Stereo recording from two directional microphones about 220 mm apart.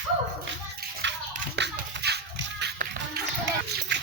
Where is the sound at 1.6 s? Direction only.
50° right (ahead or behind).